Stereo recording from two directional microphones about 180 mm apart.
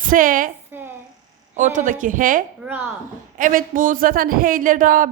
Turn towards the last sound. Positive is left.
turn(degrees=-50)  # may be behind; listen again after turning